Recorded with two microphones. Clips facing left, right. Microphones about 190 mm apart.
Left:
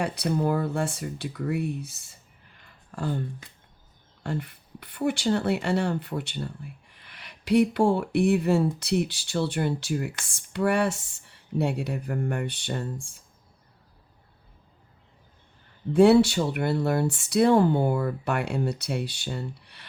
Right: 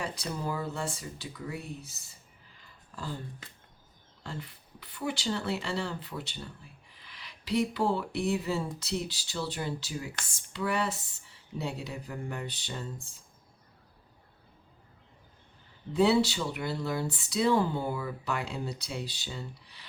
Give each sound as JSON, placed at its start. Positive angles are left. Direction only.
{"t": 0.0, "sound": "speech", "side_deg": 65}
{"t": 2.5, "sound": "a sound", "side_deg": 60}
{"t": 4.2, "sound": "speech", "side_deg": 55}
{"t": 16.0, "sound": "speech", "side_deg": 60}